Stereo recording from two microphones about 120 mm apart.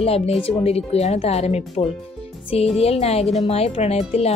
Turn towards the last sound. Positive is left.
turn(degrees=60)  # may be behind; listen again after turning